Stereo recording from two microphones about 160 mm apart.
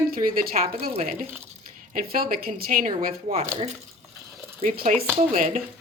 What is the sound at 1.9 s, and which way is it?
A woman's voice, 65° right (ahead or behind).